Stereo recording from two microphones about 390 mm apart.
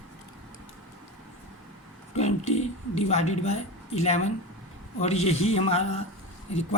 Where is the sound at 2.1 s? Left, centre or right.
Centre.